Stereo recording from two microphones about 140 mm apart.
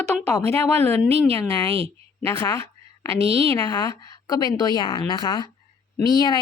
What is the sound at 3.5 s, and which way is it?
A woman's voice, 30° left (ahead or behind).